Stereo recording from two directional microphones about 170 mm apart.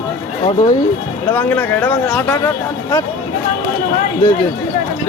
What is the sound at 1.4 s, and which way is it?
Speech, 10° left (ahead or behind).